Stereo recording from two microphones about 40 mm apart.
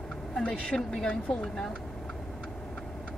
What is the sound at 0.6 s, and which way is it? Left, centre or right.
Speech, centre.